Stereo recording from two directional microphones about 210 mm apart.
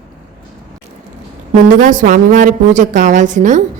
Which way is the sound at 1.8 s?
40° right (ahead or behind).